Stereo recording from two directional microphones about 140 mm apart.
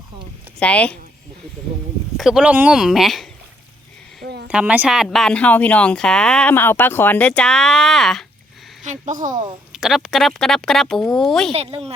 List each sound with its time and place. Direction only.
0.6 s speech: 10° left (ahead or behind)
2.1 s speech: 5° right (ahead or behind)
4.4 s speech: 10° right (ahead or behind)
5.0 s speech: 5° left (ahead or behind)
8.8 s speech: 60° right (ahead or behind)
9.7 s speech: 5° right (ahead or behind)
11.5 s speech: 45° right (ahead or behind)